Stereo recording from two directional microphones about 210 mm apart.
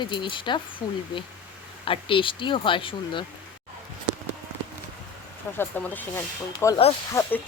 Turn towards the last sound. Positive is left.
turn(degrees=15)  # may be behind; listen again after turning